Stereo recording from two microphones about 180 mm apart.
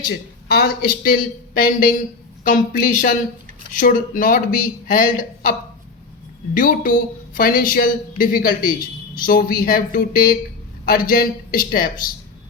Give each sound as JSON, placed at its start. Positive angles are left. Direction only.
{"t": 0.4, "sound": "speech", "side_deg": 60}
{"t": 6.6, "sound": "speech", "side_deg": 50}